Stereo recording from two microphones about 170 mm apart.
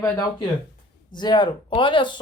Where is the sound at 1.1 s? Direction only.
25° left (ahead or behind).